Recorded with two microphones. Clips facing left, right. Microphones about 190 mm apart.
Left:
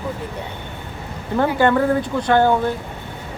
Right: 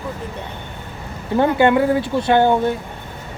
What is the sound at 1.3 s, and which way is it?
Speech, 20° right (ahead or behind).